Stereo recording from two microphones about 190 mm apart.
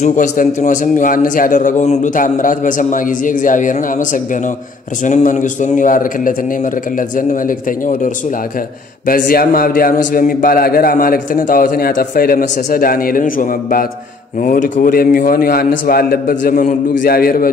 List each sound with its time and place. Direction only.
0.0 s a man's voice: 40° left (ahead or behind)